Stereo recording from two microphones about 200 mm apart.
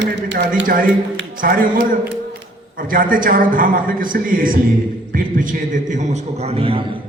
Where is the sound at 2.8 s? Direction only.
45° right (ahead or behind).